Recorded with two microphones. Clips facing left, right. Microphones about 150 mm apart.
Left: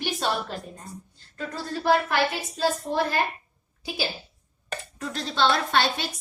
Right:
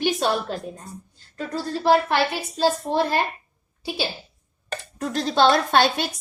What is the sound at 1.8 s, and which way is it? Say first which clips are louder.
Speech: right 4 dB; 35° right (ahead or behind).